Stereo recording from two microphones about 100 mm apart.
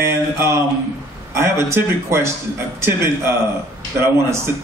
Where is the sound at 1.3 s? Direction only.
25° right (ahead or behind).